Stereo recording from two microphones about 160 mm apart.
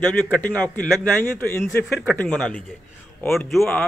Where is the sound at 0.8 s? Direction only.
10° left (ahead or behind).